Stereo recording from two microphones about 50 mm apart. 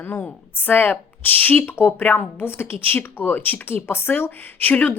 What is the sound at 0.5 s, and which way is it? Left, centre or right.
Speech, left.